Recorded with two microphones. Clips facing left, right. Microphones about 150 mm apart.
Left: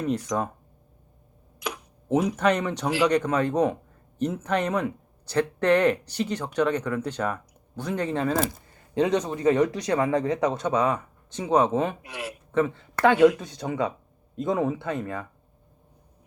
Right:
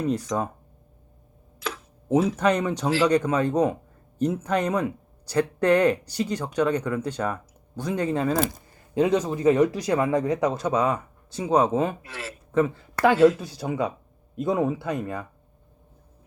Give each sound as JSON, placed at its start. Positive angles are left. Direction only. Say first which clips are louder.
{"t": 0.3, "sound": "speech", "louder": "left 1 dB", "side_deg": 0}
{"t": 1.5, "sound": "a sound", "louder": "even", "side_deg": 15}
{"t": 2.1, "sound": "speech", "louder": "right 2 dB", "side_deg": 15}
{"t": 2.5, "sound": "speech", "louder": "right 2 dB", "side_deg": -10}
{"t": 12.0, "sound": "speech", "louder": "left 2 dB", "side_deg": 15}
{"t": 12.5, "sound": "speech", "louder": "right 2 dB", "side_deg": -5}